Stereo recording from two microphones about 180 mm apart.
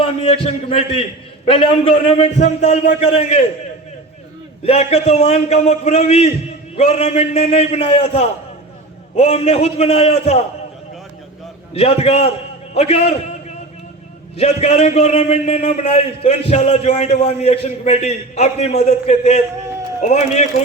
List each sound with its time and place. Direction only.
0.0 s a sound: 30° left (ahead or behind)
0.4 s a man's voice: 30° left (ahead or behind)
4.6 s a man's voice: 35° left (ahead or behind)
11.7 s a man's voice: 35° left (ahead or behind)
14.3 s a man's voice: 35° left (ahead or behind)